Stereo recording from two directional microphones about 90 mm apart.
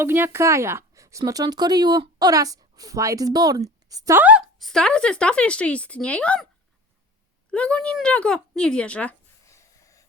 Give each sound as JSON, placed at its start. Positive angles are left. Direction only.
{"t": 0.0, "sound": "speech", "side_deg": -25}
{"t": 4.1, "sound": "a woman's voice", "side_deg": -15}
{"t": 4.5, "sound": "speech", "side_deg": 5}
{"t": 7.5, "sound": "speech", "side_deg": 10}
{"t": 9.5, "sound": "a sound", "side_deg": 35}